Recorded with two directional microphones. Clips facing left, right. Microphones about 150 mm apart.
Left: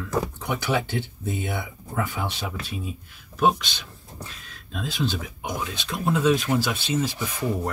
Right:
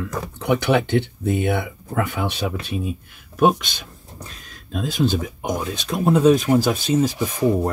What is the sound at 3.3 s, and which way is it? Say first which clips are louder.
Speech: right 4 dB; 50° right (ahead or behind).